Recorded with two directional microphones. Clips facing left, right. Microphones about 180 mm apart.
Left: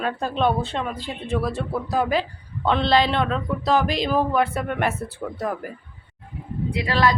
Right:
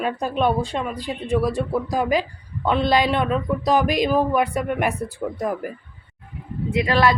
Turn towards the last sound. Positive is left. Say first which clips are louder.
# right 3 dB
turn(degrees=-20)  # may be behind; listen again after turning